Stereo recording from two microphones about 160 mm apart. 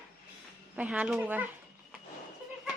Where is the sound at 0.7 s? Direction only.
10° right (ahead or behind).